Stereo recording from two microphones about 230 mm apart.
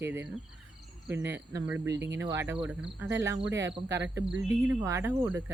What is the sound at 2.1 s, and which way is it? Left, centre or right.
Speech, centre.